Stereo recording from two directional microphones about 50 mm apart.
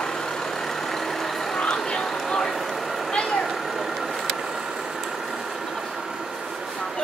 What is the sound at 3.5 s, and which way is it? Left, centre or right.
Vehicle, centre.